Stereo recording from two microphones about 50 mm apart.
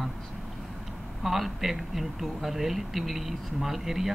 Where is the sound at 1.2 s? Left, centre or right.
Centre.